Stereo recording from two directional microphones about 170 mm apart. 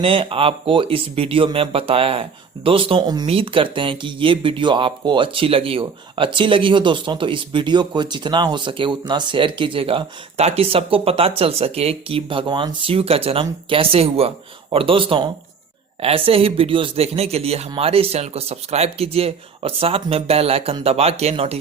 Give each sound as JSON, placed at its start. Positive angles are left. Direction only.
{"t": 0.0, "sound": "speech", "side_deg": -30}